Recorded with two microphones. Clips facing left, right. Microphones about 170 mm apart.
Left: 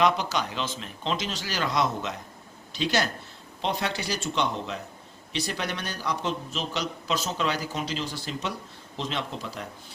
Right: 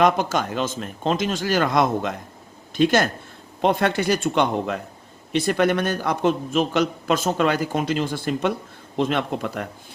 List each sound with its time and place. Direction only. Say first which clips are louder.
0.0 s a man's voice: right 5 dB; 50° right (ahead or behind)